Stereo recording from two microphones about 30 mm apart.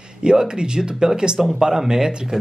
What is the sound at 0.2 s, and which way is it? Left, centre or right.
Speech, right.